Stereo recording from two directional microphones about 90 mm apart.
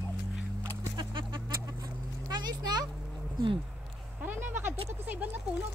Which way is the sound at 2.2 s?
50° right (ahead or behind).